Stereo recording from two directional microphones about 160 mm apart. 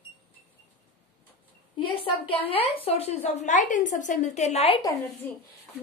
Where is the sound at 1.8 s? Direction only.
30° left (ahead or behind).